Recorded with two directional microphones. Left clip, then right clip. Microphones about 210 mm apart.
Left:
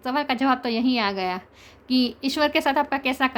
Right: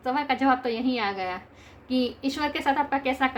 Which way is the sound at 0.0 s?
50° left (ahead or behind).